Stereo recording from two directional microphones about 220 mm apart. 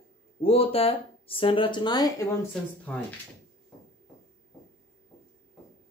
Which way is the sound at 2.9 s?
5° left (ahead or behind).